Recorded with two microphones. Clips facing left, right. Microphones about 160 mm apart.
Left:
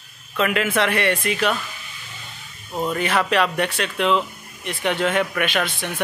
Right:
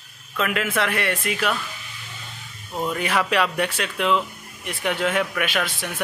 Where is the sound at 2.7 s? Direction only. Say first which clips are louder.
Left 2 dB; centre (ahead or behind).